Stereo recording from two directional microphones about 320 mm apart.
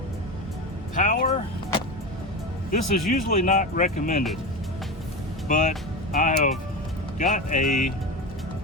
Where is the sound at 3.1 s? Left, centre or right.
Left.